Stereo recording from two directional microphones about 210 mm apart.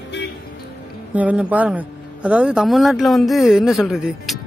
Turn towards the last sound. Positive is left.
turn(degrees=0)  # may be behind; listen again after turning